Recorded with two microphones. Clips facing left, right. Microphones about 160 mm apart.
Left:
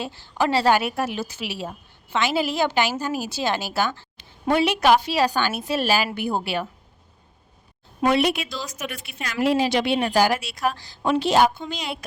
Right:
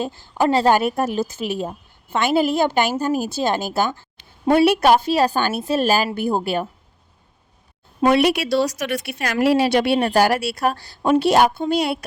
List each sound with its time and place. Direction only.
0.0 s a woman's voice: 45° right (ahead or behind)
8.1 s speech: 65° right (ahead or behind)
10.7 s a woman's voice: 40° right (ahead or behind)
11.7 s speech: 60° right (ahead or behind)